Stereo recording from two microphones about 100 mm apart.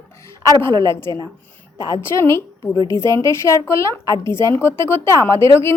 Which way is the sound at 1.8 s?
30° left (ahead or behind).